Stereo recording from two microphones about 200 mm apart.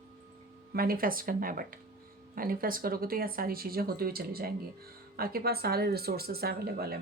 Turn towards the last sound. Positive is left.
turn(degrees=-50)  # may be behind; listen again after turning